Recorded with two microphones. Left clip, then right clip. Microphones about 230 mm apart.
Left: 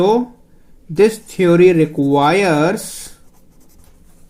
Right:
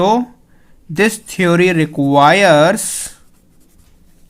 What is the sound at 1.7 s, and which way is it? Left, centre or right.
Speech, right.